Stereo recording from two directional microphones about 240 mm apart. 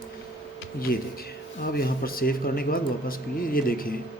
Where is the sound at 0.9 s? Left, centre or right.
Left.